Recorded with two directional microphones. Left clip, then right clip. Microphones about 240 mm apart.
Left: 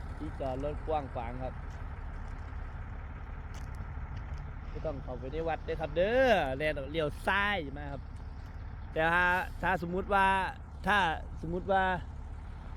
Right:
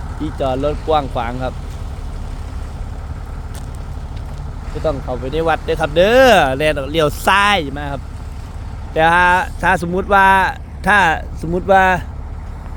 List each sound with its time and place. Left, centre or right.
0.3 s speech: right
5.2 s speech: centre